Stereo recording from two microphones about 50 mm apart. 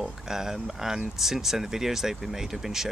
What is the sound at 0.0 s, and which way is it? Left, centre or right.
Speech, centre.